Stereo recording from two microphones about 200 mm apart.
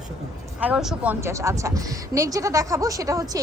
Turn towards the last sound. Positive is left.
turn(degrees=-15)  # may be behind; listen again after turning